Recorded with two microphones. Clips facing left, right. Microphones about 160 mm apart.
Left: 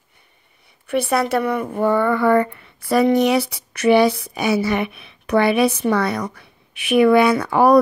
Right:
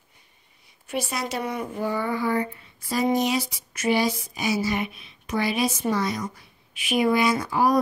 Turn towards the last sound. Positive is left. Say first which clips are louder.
# left 7 dB
turn(degrees=65)  # may be behind; listen again after turning